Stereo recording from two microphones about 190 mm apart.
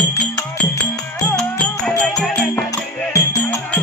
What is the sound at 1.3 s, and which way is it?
Music, 5° left (ahead or behind).